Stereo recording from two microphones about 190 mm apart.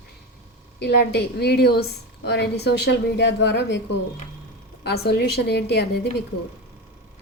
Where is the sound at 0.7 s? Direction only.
60° left (ahead or behind).